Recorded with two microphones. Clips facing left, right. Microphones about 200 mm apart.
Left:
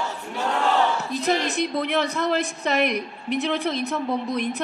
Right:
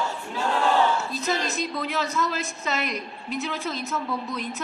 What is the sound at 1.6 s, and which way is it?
A woman's voice, 60° left (ahead or behind).